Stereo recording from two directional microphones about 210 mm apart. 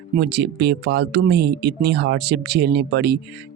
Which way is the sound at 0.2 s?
50° right (ahead or behind).